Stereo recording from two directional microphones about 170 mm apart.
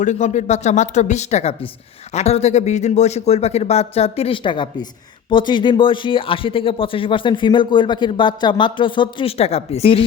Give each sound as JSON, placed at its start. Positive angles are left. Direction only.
{"t": 0.0, "sound": "speech", "side_deg": 45}